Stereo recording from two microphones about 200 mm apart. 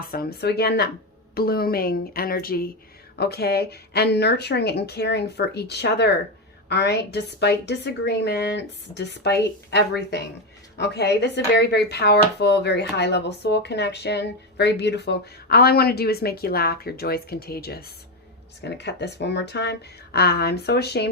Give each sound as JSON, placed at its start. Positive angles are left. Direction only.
{"t": 0.1, "sound": "speech", "side_deg": 50}